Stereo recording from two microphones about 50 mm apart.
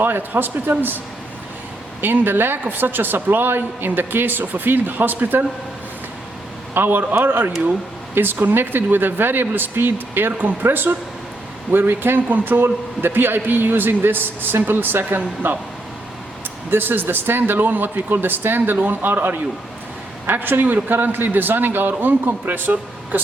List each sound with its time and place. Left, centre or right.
0.0 s a man's voice: right
2.0 s a man's voice: right
6.7 s a man's voice: right
16.6 s a man's voice: right